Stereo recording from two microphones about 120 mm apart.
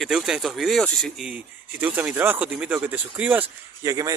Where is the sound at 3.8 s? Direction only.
30° right (ahead or behind).